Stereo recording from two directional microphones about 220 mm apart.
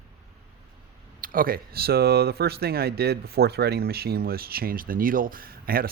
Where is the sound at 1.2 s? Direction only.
40° right (ahead or behind).